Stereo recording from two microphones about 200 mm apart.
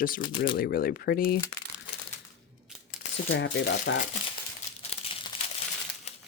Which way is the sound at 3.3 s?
70° left (ahead or behind).